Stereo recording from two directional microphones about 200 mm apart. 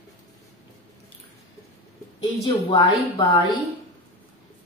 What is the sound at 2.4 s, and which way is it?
Speech, 25° left (ahead or behind).